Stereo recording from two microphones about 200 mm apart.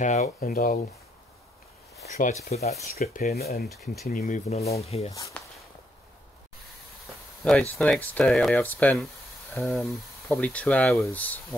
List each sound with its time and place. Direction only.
0.0 s speech: 35° left (ahead or behind)
2.0 s a sound: 55° left (ahead or behind)
2.4 s speech: 35° left (ahead or behind)
3.0 s speech: 50° left (ahead or behind)
4.1 s speech: 40° left (ahead or behind)
5.4 s walk: 5° left (ahead or behind)
7.4 s speech: 5° left (ahead or behind)